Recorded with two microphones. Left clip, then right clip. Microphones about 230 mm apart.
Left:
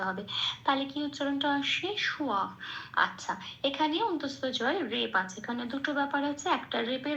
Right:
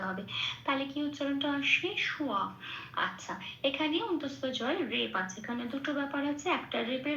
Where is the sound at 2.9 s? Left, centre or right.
Left.